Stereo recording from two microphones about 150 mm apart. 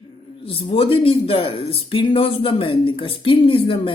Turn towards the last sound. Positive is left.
turn(degrees=35)  # may be behind; listen again after turning